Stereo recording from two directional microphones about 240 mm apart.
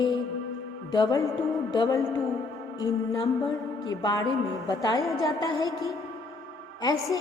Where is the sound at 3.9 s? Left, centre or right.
Centre.